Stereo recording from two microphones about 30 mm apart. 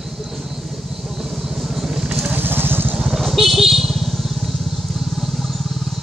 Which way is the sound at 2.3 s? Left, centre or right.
Right.